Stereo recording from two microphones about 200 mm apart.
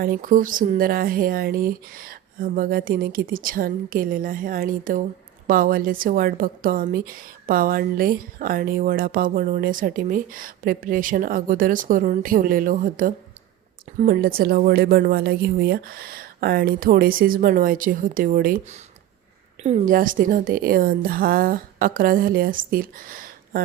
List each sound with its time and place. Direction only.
0.0 s a woman's voice: 45° right (ahead or behind)